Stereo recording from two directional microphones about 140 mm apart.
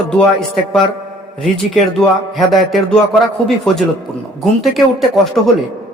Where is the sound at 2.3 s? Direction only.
Centre (ahead or behind).